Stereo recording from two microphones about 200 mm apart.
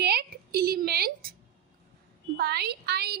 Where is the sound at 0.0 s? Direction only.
50° right (ahead or behind).